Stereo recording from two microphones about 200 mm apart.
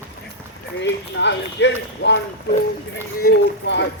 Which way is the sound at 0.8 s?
60° left (ahead or behind).